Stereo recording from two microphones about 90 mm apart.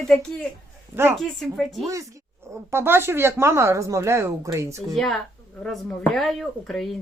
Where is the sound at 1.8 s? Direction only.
35° right (ahead or behind).